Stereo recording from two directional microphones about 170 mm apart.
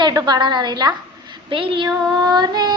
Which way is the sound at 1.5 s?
30° right (ahead or behind).